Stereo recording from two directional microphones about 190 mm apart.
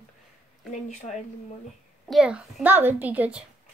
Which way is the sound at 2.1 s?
5° right (ahead or behind).